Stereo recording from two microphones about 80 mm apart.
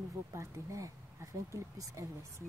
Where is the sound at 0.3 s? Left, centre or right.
Right.